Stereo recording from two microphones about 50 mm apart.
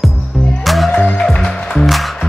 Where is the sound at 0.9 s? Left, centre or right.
Centre.